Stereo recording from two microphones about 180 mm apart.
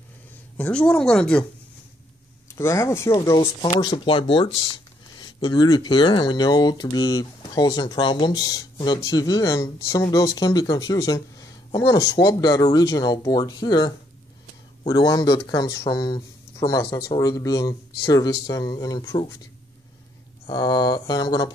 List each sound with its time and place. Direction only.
0.6 s speech: 5° left (ahead or behind)
2.5 s speech: 15° left (ahead or behind)
20.4 s speech: 25° left (ahead or behind)